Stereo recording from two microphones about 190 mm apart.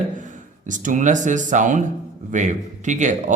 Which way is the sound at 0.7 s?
40° right (ahead or behind).